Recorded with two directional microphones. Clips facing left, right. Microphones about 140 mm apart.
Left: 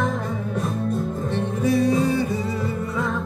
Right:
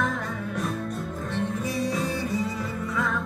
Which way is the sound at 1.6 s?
55° left (ahead or behind).